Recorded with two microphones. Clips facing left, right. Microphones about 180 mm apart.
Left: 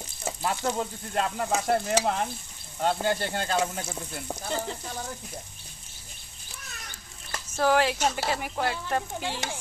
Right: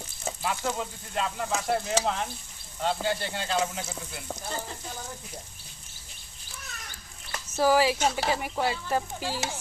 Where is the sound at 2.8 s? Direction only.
50° left (ahead or behind).